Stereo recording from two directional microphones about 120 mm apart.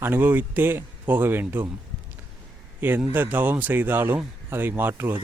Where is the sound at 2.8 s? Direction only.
15° right (ahead or behind).